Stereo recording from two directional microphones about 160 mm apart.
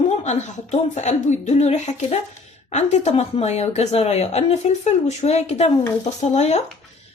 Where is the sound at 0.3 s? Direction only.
45° left (ahead or behind).